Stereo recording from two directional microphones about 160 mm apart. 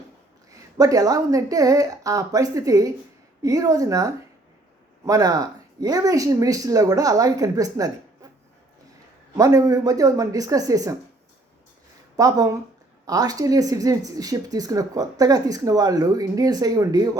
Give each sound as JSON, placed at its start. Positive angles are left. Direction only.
{"t": 0.5, "sound": "speech", "side_deg": -20}
{"t": 9.4, "sound": "speech", "side_deg": -20}
{"t": 12.1, "sound": "speech", "side_deg": -20}